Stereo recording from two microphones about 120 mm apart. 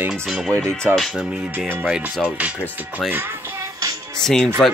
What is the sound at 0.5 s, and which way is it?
Speech, 20° right (ahead or behind).